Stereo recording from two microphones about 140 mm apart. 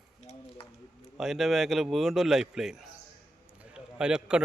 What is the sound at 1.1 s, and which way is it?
A man's voice, centre (ahead or behind).